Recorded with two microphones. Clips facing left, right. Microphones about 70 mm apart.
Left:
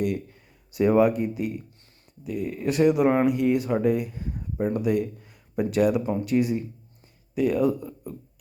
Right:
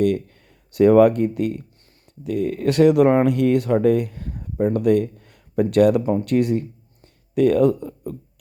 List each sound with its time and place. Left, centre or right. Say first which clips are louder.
0.0 s speech: right 7 dB; right